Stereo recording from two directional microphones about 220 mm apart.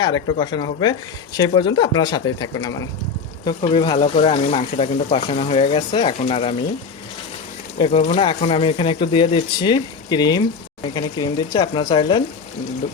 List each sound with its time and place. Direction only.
0.0 s speech: 20° left (ahead or behind)
7.8 s speech: 25° left (ahead or behind)